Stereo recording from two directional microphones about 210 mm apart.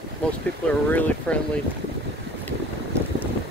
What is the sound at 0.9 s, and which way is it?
Speech, 5° left (ahead or behind).